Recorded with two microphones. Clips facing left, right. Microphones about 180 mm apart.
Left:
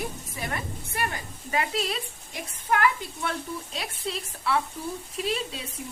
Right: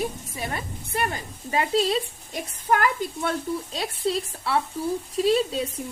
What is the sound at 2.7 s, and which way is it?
A woman's voice, 40° right (ahead or behind).